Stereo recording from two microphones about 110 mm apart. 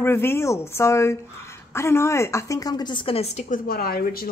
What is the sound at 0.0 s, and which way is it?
A woman's voice, 20° left (ahead or behind).